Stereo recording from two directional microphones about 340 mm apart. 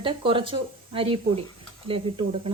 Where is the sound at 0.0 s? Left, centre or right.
Centre.